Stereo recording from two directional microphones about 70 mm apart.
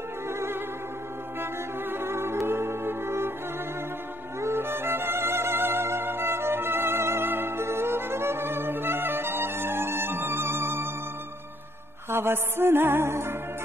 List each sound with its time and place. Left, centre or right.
0.3 s music: right
4.4 s music: right
12.1 s music: right